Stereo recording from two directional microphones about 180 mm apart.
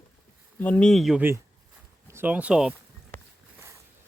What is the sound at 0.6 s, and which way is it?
Speech, 5° left (ahead or behind).